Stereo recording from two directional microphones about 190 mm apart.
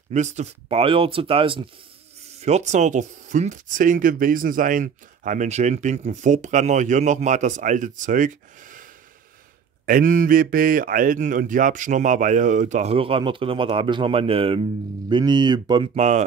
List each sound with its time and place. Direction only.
0.1 s speech: 40° right (ahead or behind)
9.8 s speech: 45° right (ahead or behind); by 15.9 s 20° right (ahead or behind)
15.9 s speech: 35° right (ahead or behind)